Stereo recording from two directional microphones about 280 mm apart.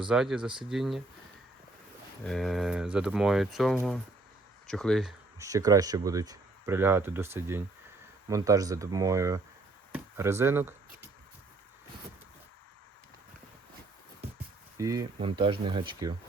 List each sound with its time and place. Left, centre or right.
0.1 s speech: centre
2.2 s speech: centre
5.4 s speech: centre
9.9 s chopping: centre
14.8 s speech: centre